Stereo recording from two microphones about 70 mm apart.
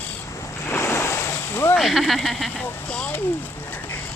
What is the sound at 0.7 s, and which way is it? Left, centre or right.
Waves, left.